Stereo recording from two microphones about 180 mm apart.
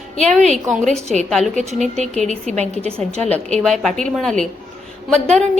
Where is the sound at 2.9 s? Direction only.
5° left (ahead or behind).